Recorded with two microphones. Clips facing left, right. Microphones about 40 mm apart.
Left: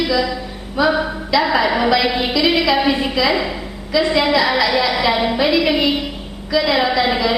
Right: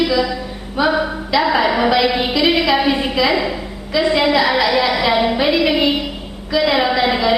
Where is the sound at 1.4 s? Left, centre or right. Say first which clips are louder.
Right 2 dB; centre.